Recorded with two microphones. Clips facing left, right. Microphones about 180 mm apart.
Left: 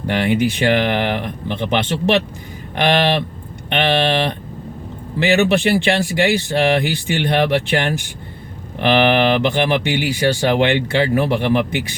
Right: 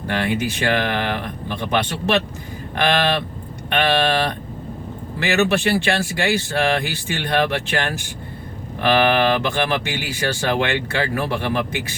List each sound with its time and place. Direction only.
0.1 s speech: 20° left (ahead or behind)